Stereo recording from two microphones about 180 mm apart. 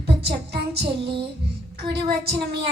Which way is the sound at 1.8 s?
60° right (ahead or behind).